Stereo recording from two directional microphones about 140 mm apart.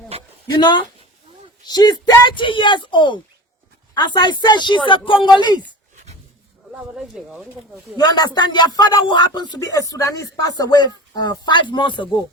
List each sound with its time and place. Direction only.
0.6 s speech: 35° left (ahead or behind)
6.7 s speech: 5° right (ahead or behind)
7.9 s speech: 30° left (ahead or behind)